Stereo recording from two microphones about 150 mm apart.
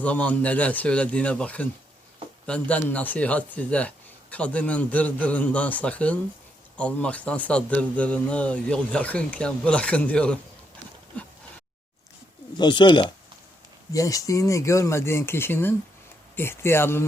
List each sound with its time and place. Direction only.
0.0 s speech: 10° left (ahead or behind)
11.1 s a sound: 10° left (ahead or behind)
12.5 s speech: 30° left (ahead or behind); by 17.1 s 15° left (ahead or behind)